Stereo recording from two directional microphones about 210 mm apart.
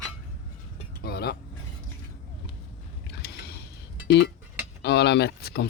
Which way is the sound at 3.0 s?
50° left (ahead or behind).